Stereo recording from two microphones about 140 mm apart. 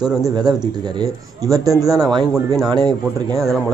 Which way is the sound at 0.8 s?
30° right (ahead or behind).